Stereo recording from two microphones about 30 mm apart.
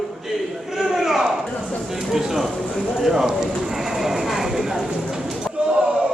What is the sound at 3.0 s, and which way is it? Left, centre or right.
Bird, centre.